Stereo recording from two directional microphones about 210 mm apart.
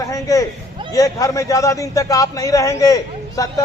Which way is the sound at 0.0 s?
15° left (ahead or behind).